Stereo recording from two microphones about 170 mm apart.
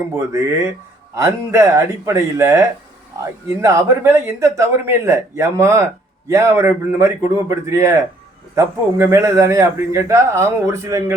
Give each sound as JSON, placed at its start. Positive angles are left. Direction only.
{"t": 0.2, "sound": "a man's voice", "side_deg": -15}